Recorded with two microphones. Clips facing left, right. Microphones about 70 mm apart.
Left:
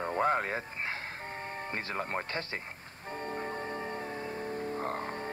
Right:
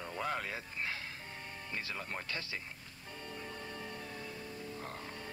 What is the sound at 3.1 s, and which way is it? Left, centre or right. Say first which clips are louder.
Music: left 9 dB; left.